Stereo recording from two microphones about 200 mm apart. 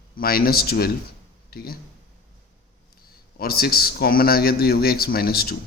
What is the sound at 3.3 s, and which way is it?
Speech, 50° left (ahead or behind).